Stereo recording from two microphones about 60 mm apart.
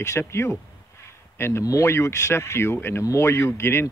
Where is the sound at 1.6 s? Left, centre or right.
Left.